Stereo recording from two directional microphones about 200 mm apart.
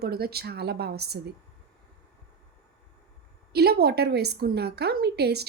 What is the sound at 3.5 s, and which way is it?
A woman's voice, 50° right (ahead or behind).